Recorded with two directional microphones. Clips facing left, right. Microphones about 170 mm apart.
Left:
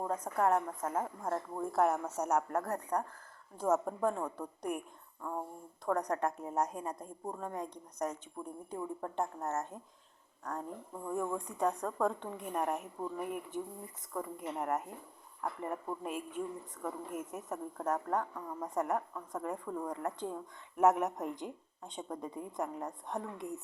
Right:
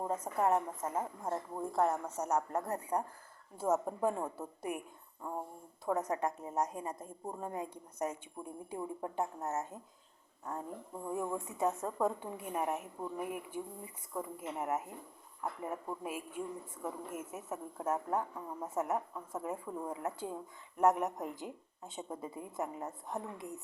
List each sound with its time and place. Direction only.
0.1 s a woman's voice: 5° right (ahead or behind)
1.7 s speech: 10° left (ahead or behind)
2.6 s a woman's voice: 5° right (ahead or behind)
5.8 s a woman's voice: 5° right (ahead or behind)
9.1 s a woman's voice: 5° right (ahead or behind)